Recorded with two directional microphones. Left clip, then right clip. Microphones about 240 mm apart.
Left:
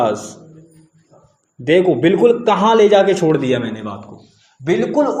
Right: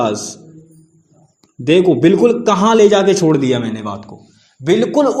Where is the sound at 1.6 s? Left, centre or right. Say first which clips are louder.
Right 2 dB; right.